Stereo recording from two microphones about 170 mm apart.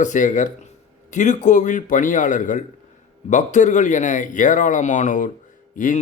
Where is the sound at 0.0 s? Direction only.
45° left (ahead or behind).